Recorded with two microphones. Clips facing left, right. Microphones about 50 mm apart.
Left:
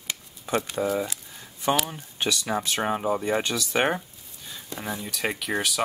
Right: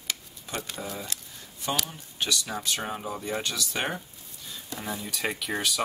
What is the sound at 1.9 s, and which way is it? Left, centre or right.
Speech, left.